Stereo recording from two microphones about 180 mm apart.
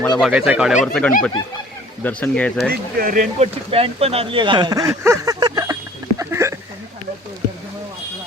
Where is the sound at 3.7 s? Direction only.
35° right (ahead or behind).